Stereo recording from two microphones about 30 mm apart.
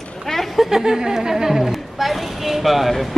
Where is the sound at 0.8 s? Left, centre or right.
Centre.